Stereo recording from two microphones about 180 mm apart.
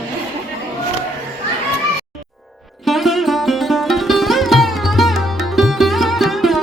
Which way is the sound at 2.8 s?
Centre (ahead or behind).